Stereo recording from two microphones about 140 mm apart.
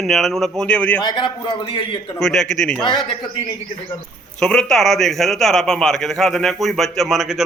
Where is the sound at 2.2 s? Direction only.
5° left (ahead or behind).